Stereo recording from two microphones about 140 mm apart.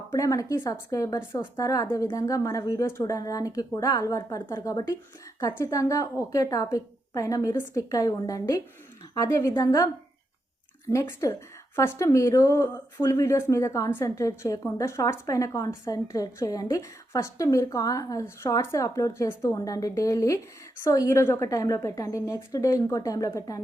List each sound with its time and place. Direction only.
0.1 s speech: 25° left (ahead or behind)